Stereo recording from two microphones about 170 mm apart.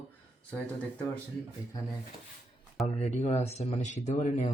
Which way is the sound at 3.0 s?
40° left (ahead or behind).